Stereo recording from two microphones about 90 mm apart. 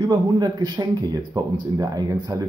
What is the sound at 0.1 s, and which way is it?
Speech, 50° right (ahead or behind).